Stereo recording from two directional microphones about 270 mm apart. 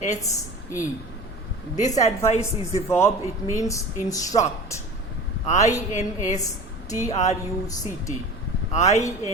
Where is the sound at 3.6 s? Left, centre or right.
Centre.